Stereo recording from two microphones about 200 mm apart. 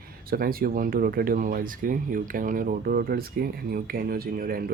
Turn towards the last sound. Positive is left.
turn(degrees=-45)  # may be behind; listen again after turning